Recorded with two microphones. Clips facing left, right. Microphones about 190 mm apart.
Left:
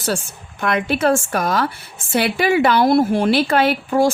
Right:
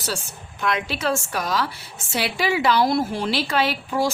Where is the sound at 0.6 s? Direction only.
55° left (ahead or behind).